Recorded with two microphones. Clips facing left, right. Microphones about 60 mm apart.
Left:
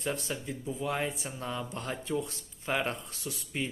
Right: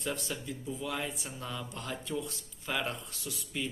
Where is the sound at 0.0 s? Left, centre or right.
Left.